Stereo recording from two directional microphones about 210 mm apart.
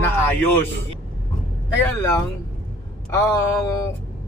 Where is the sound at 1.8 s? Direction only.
15° left (ahead or behind).